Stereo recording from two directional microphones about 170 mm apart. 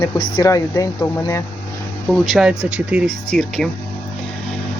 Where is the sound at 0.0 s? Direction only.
20° left (ahead or behind).